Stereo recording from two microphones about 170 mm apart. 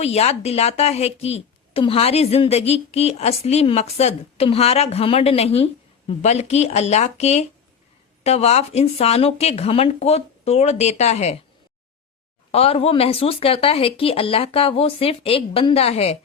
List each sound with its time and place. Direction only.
0.0 s a woman's voice: 40° left (ahead or behind)
12.5 s a woman's voice: 35° left (ahead or behind)